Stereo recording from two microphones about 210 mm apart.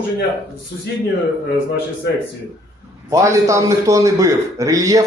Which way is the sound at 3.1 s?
15° right (ahead or behind).